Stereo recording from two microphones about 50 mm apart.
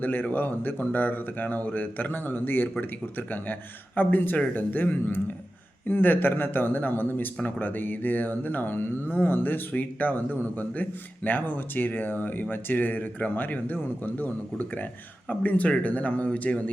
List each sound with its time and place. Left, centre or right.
0.0 s speech: left